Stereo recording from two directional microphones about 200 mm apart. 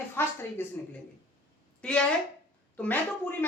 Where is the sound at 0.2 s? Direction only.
10° left (ahead or behind).